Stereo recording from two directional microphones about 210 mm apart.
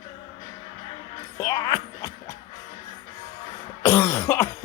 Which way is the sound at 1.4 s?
15° left (ahead or behind).